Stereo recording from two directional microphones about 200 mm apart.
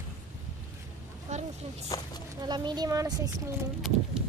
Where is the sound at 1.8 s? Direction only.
20° left (ahead or behind).